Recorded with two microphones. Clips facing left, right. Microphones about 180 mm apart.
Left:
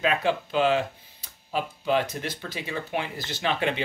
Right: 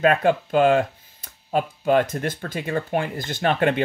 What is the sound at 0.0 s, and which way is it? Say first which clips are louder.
Speech: right 6 dB; 50° right (ahead or behind).